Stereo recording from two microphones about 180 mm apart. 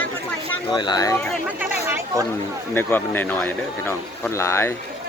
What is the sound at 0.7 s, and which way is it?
Speech, 25° left (ahead or behind).